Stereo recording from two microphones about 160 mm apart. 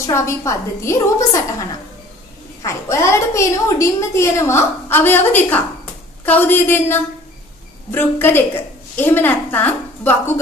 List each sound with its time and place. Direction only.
0.0 s a woman's voice: 15° left (ahead or behind)